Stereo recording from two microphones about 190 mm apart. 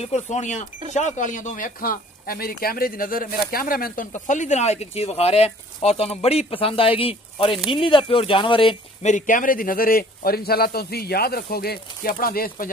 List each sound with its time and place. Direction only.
0.0 s speech: 35° left (ahead or behind)
9.1 s a man's voice: 45° left (ahead or behind)